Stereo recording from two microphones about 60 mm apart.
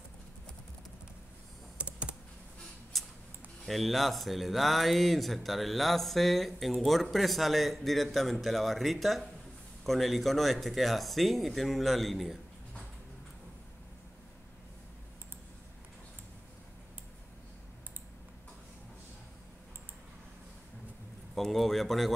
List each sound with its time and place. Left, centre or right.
1.8 s computer keyboard: right
2.9 s a sound: centre
3.6 s speech: centre
21.4 s speech: centre